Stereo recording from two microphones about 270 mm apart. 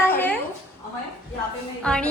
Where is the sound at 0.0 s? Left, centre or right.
Centre.